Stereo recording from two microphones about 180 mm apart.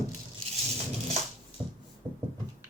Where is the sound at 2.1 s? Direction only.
10° right (ahead or behind).